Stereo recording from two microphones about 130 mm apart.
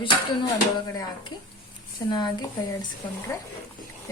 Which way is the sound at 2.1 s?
35° left (ahead or behind).